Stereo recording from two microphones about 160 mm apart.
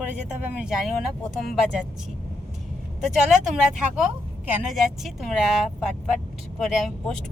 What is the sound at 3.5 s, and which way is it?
Speech, 5° right (ahead or behind).